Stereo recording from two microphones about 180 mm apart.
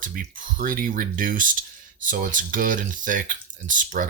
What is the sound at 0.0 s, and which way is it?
Speech, 50° right (ahead or behind).